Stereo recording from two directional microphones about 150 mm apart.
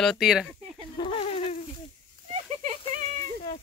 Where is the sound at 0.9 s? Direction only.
40° left (ahead or behind).